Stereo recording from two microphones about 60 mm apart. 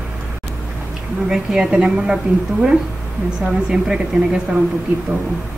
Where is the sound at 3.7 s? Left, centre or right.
Centre.